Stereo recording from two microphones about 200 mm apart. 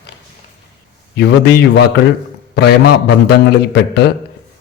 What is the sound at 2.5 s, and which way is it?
A man's voice, 55° left (ahead or behind).